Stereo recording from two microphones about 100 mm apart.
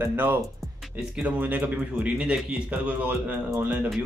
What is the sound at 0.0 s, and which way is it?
A man's voice, 20° right (ahead or behind).